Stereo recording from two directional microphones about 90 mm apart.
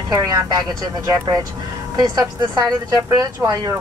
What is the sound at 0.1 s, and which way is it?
Speech, 45° right (ahead or behind).